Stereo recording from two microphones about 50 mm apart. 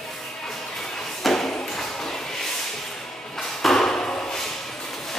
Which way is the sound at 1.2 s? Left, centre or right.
Centre.